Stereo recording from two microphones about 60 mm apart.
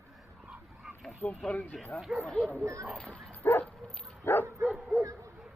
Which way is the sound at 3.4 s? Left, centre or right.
Left.